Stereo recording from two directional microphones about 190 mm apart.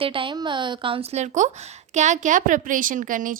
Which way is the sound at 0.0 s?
25° right (ahead or behind).